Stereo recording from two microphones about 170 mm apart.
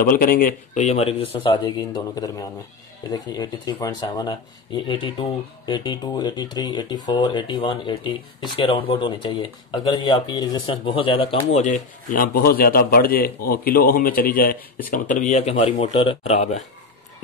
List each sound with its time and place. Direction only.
0.0 s a man's voice: 55° left (ahead or behind); by 11.6 s 30° left (ahead or behind)
11.6 s a man's voice: 50° left (ahead or behind)
15.6 s speech: 30° left (ahead or behind)